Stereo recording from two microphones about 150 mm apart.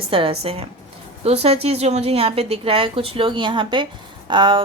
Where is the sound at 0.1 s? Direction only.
35° right (ahead or behind).